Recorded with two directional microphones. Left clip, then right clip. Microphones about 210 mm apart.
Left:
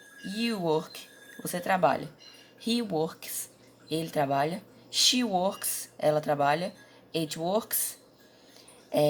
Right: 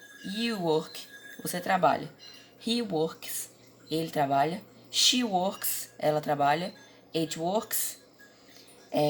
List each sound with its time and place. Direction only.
0.3 s speech: 20° left (ahead or behind)